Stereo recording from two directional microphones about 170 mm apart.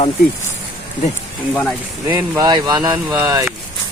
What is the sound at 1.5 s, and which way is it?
Speech, 10° left (ahead or behind).